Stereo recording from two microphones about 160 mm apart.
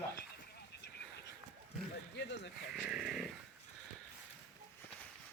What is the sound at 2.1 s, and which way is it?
Speech, 90° left.